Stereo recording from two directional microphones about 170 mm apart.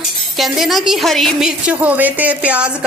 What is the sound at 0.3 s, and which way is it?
A woman's voice, centre (ahead or behind).